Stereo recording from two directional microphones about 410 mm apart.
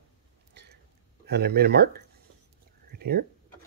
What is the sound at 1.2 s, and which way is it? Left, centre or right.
Speech, right.